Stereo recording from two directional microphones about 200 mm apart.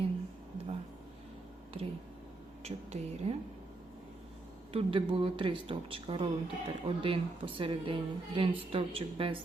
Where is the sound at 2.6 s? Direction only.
30° right (ahead or behind).